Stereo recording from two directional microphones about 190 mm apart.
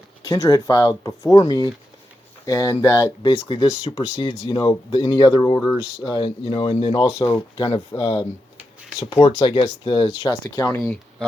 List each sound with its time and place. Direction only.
0.3 s speech: 20° left (ahead or behind)
10.5 s speech: 15° left (ahead or behind)